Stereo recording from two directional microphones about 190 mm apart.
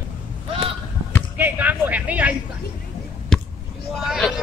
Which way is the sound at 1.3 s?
10° right (ahead or behind).